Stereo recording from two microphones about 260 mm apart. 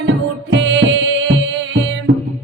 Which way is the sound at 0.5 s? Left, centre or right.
Right.